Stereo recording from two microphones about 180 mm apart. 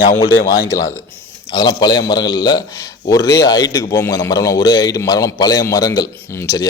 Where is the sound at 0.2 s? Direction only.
20° left (ahead or behind).